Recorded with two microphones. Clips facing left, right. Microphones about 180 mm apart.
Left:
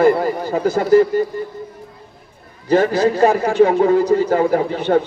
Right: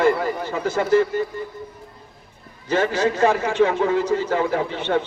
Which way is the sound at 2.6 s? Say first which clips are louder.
Left 6 dB; 40° left (ahead or behind).